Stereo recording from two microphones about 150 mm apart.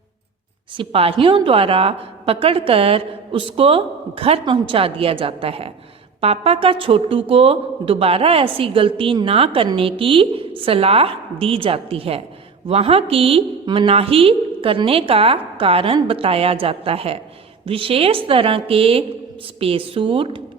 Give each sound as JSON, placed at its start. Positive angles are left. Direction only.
{"t": 0.8, "sound": "a woman's voice", "side_deg": -40}